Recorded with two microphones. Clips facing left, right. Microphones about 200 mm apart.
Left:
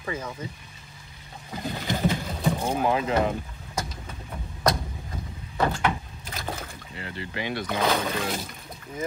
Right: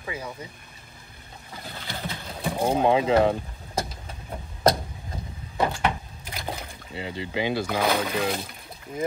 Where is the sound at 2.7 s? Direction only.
25° right (ahead or behind).